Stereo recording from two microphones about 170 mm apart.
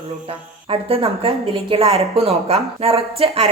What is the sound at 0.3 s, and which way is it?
A woman's voice, 35° right (ahead or behind).